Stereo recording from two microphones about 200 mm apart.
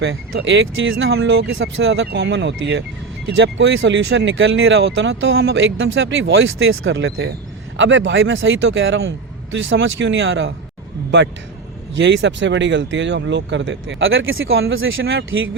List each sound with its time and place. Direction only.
0.0 s speech: 60° right (ahead or behind)
11.9 s speech: 65° right (ahead or behind)